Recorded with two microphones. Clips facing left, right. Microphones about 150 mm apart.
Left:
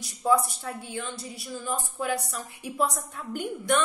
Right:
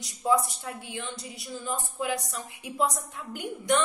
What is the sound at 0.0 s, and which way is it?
A woman's voice, 20° right (ahead or behind).